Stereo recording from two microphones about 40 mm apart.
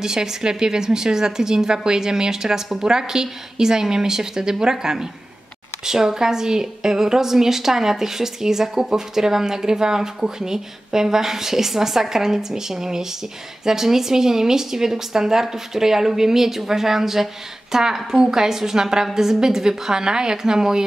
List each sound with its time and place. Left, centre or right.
0.0 s a woman's voice: centre